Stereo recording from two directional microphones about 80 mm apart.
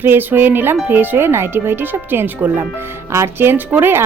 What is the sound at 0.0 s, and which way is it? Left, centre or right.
Speech, right.